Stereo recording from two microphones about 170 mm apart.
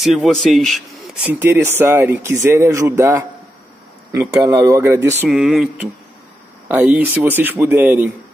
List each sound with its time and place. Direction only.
0.0 s a man's voice: centre (ahead or behind)
1.3 s speech: 15° right (ahead or behind)
5.2 s a man's voice: centre (ahead or behind)